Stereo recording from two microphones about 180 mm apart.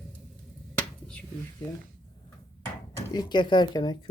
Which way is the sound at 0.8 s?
5° left (ahead or behind).